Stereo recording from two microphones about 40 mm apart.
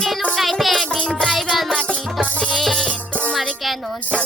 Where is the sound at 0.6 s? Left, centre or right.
Centre.